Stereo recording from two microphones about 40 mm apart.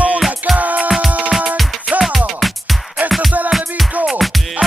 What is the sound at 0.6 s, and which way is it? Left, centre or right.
Music, right.